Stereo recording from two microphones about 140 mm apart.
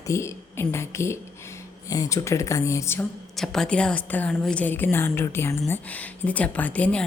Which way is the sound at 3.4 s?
5° left (ahead or behind).